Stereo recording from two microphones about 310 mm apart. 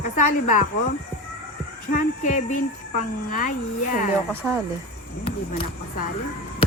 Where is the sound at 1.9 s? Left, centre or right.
Left.